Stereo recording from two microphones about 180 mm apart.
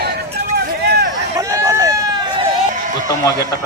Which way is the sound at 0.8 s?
65° right (ahead or behind).